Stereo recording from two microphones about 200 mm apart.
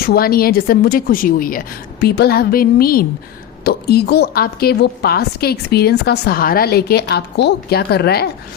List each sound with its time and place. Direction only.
0.0 s a woman's voice: 50° left (ahead or behind)